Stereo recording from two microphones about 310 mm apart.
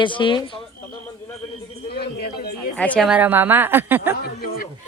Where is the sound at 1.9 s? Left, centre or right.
Left.